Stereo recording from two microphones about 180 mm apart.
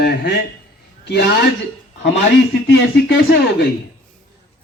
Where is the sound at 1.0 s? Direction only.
70° left (ahead or behind).